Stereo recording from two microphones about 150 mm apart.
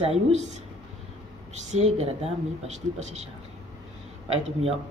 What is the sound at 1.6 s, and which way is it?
Speech, 50° right (ahead or behind).